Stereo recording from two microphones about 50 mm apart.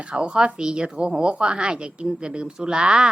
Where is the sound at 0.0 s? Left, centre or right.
Centre.